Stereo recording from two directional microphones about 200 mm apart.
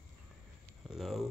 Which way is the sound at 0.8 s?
Centre (ahead or behind).